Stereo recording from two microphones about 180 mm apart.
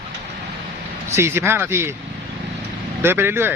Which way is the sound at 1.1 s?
15° right (ahead or behind).